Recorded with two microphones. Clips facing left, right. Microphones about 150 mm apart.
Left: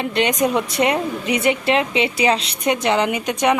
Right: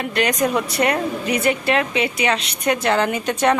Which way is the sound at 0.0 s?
25° left (ahead or behind).